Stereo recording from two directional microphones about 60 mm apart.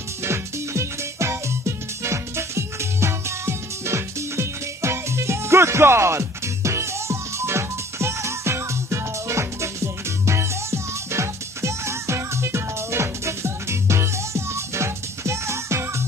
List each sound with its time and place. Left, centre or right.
0.2 s music: right